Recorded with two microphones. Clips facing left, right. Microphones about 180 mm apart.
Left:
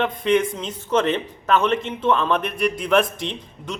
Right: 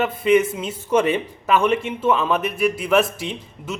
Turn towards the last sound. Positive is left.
turn(degrees=-5)  # may be behind; listen again after turning